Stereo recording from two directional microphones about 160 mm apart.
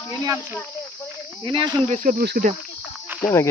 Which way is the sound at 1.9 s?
55° right (ahead or behind).